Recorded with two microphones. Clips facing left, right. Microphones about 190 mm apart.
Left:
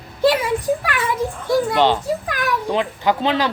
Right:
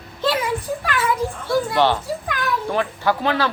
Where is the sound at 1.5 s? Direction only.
15° left (ahead or behind).